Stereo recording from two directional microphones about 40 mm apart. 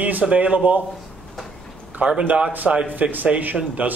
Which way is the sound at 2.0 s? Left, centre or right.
Right.